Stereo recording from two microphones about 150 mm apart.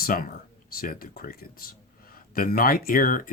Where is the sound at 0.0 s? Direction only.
70° left (ahead or behind).